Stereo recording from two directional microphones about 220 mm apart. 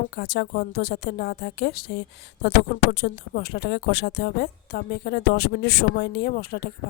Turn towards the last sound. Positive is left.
turn(degrees=45)  # may be behind; listen again after turning